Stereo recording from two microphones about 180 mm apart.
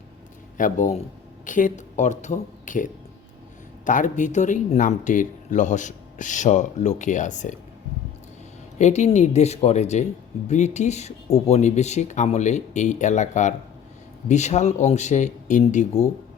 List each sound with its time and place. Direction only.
0.5 s speech: 45° left (ahead or behind)
8.8 s speech: 40° left (ahead or behind)